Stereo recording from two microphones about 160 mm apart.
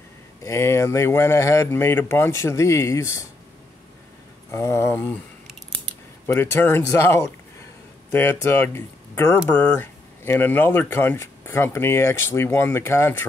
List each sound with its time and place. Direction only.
0.4 s speech: 20° left (ahead or behind)
4.5 s speech: 15° left (ahead or behind)
6.2 s speech: 15° left (ahead or behind)